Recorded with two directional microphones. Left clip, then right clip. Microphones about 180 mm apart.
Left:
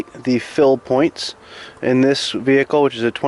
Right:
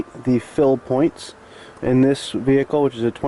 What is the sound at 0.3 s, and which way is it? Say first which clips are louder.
Speech: left 3 dB; 20° left (ahead or behind).